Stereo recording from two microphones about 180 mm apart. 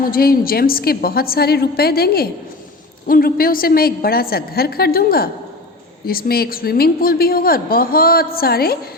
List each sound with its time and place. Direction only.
0.1 s a woman's voice: 55° left (ahead or behind)